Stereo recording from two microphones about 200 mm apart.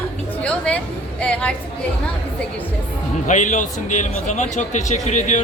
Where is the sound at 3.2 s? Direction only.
40° left (ahead or behind).